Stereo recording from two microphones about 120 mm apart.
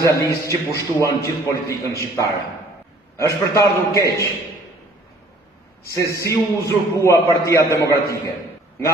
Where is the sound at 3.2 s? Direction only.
25° left (ahead or behind).